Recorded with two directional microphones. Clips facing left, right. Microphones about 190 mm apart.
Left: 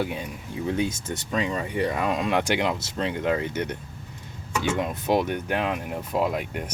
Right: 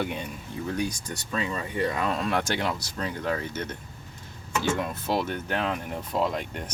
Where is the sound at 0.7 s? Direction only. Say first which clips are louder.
Left 4 dB; 25° left (ahead or behind).